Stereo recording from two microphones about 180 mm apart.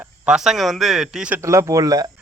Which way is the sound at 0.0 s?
5° right (ahead or behind).